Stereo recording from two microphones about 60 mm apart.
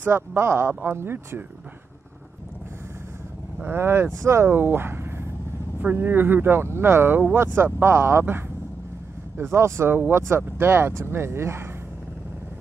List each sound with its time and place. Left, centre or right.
0.0 s speech: right
0.7 s speech: right
3.6 s speech: right